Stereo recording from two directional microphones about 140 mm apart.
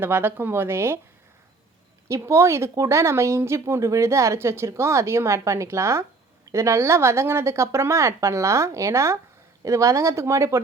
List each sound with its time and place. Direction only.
0.0 s speech: 15° right (ahead or behind)
2.0 s speech: 20° right (ahead or behind)